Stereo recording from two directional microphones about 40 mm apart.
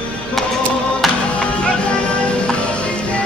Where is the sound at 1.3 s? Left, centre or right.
Left.